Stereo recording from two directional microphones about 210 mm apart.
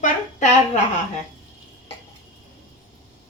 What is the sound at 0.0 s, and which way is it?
Speech, 35° left (ahead or behind).